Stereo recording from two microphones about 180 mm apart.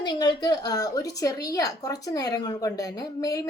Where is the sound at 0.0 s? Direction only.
25° left (ahead or behind).